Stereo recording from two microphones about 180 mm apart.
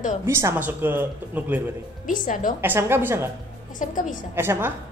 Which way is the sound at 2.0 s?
50° left (ahead or behind).